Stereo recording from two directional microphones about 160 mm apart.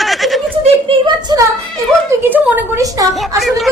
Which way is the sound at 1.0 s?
25° right (ahead or behind).